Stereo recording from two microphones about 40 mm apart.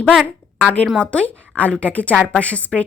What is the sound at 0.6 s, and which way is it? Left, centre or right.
A woman's voice, left.